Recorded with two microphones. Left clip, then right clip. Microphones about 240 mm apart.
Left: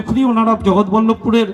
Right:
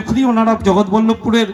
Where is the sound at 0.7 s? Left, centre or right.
Left.